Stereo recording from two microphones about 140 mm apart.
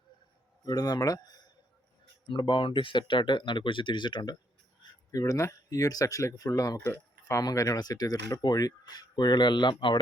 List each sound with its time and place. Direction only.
0.6 s speech: 25° left (ahead or behind)